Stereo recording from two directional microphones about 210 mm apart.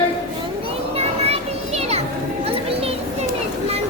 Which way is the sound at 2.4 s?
25° right (ahead or behind).